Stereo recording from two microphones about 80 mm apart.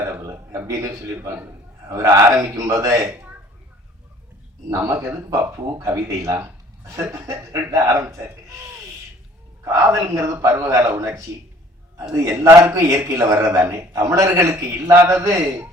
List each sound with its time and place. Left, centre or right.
0.7 s a man's voice: right
3.1 s a sound: right
4.7 s a man's voice: right
9.6 s a man's voice: right